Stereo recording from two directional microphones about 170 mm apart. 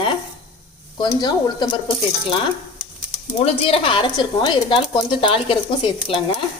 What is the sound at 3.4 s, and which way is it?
Speech, 35° left (ahead or behind).